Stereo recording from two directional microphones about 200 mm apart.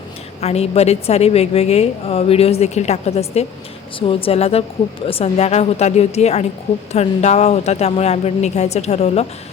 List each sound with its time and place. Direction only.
0.4 s a woman's voice: 30° left (ahead or behind)